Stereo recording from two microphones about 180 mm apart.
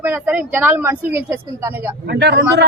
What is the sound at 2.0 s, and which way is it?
Speech, 65° right (ahead or behind).